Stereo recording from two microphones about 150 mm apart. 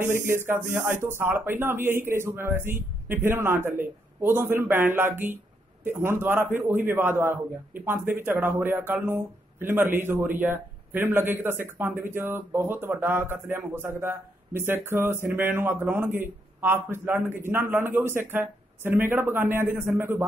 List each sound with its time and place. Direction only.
0.0 s a man's voice: 15° right (ahead or behind)